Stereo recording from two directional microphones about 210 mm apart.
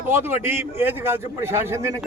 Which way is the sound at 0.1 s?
10° right (ahead or behind).